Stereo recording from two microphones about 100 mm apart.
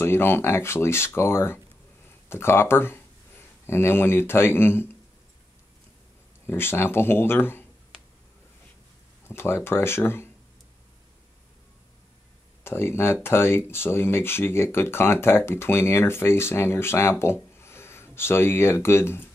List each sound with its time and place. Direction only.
0.0 s speech: 25° left (ahead or behind)
6.4 s speech: 20° left (ahead or behind)
9.3 s speech: 25° left (ahead or behind)
12.6 s speech: 25° left (ahead or behind)